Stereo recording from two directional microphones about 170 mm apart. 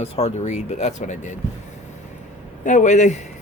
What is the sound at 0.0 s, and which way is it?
Speech, 35° left (ahead or behind).